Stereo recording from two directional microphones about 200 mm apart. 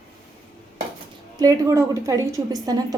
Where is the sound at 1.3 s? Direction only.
15° right (ahead or behind).